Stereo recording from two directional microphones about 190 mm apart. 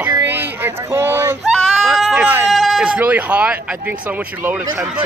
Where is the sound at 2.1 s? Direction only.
10° right (ahead or behind).